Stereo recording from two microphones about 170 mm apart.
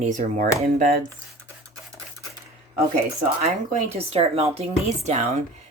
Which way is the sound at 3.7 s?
40° right (ahead or behind).